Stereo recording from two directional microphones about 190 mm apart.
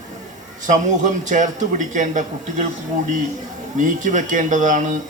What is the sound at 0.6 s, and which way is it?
Speech, 40° right (ahead or behind).